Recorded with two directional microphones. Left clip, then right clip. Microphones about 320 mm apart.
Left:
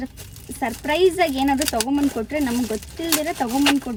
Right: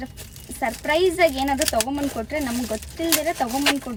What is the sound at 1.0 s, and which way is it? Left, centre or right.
Speech, centre.